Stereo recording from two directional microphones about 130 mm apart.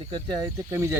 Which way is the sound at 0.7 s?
20° right (ahead or behind).